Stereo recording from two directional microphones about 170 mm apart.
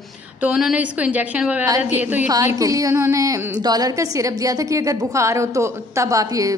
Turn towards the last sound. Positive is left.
turn(degrees=-20)  # may be behind; listen again after turning